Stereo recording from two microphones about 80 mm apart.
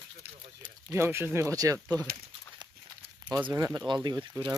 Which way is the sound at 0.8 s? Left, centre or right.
Right.